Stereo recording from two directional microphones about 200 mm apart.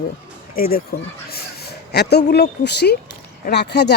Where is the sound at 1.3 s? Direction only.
50° left (ahead or behind).